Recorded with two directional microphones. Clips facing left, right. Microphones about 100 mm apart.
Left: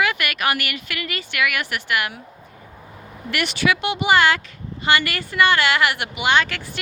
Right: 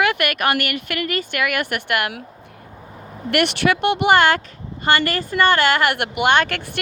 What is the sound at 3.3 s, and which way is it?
Speech, 60° right (ahead or behind).